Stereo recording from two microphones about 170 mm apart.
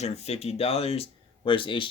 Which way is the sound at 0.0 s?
40° left (ahead or behind).